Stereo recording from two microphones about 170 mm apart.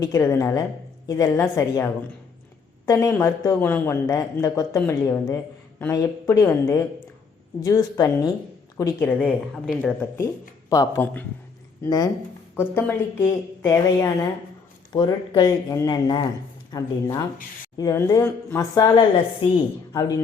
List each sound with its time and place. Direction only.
0.0 s speech: 20° left (ahead or behind)